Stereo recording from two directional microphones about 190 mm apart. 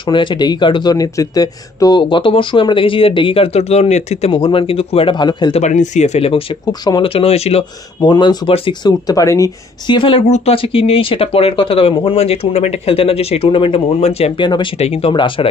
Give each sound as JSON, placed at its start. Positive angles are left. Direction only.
{"t": 0.0, "sound": "speech", "side_deg": 25}
{"t": 5.6, "sound": "speech", "side_deg": 40}
{"t": 6.6, "sound": "speech", "side_deg": 20}